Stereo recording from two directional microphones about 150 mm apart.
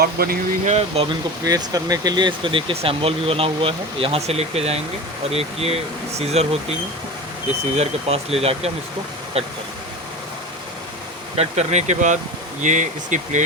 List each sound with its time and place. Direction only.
0.0 s speech: 90° right
0.6 s speech: 45° right (ahead or behind)
1.5 s speech: 25° right (ahead or behind); by 6.7 s 45° right (ahead or behind)
7.8 s speech: 40° right (ahead or behind)
11.3 s speech: 50° right (ahead or behind)